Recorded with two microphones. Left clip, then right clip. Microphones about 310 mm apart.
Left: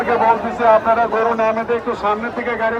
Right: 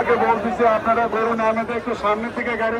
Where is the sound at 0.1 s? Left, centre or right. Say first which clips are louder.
Left 5 dB; left.